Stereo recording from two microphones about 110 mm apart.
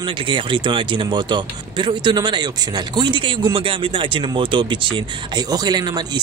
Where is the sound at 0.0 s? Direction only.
50° right (ahead or behind).